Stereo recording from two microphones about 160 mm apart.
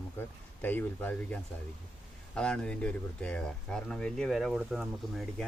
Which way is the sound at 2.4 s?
5° left (ahead or behind).